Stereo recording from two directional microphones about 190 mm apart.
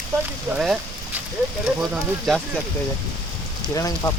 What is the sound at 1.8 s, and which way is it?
Speech, centre (ahead or behind).